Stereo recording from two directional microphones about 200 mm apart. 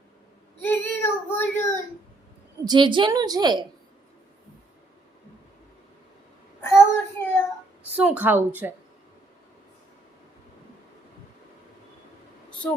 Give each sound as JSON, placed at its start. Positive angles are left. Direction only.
{"t": 0.6, "sound": "child singing", "side_deg": 10}
{"t": 2.6, "sound": "a woman's voice", "side_deg": -25}
{"t": 6.6, "sound": "child singing", "side_deg": 10}
{"t": 7.9, "sound": "a woman's voice", "side_deg": -5}